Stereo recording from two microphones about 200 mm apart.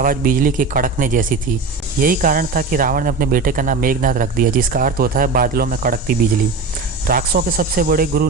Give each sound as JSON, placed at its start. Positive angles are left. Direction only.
{"t": 0.0, "sound": "speech", "side_deg": -45}